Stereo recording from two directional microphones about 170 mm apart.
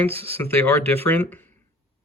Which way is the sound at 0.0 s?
10° left (ahead or behind).